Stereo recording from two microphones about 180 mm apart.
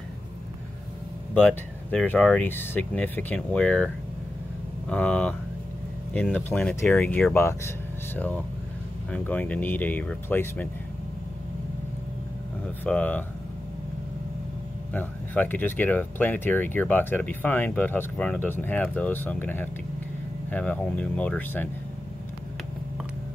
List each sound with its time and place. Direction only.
1.9 s speech: 5° left (ahead or behind)
6.3 s speech: 10° left (ahead or behind)
9.1 s speech: 10° left (ahead or behind)
12.8 s speech: 10° left (ahead or behind)
15.0 s speech: 10° left (ahead or behind)